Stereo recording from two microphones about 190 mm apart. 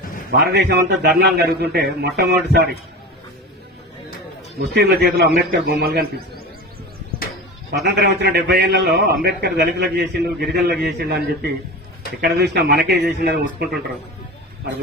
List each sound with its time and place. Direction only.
0.3 s a man's voice: 55° right (ahead or behind)
4.7 s a man's voice: 60° right (ahead or behind)
7.9 s a man's voice: 60° right (ahead or behind)